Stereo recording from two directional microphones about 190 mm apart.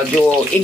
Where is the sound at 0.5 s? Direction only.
5° left (ahead or behind).